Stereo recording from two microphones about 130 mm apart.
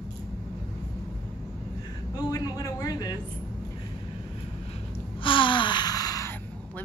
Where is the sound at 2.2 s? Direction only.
30° left (ahead or behind).